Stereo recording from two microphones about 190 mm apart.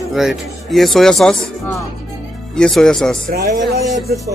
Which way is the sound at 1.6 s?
15° left (ahead or behind).